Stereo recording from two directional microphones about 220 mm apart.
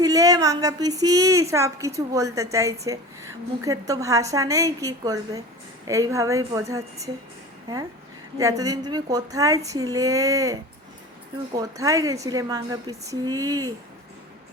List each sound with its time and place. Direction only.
0.0 s speech: 15° right (ahead or behind)
8.4 s speech: 15° right (ahead or behind)